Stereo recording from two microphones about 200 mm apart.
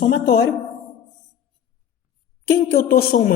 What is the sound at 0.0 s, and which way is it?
Speech, 55° left (ahead or behind).